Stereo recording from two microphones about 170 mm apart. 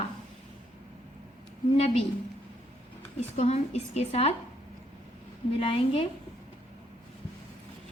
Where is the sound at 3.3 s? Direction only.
40° left (ahead or behind).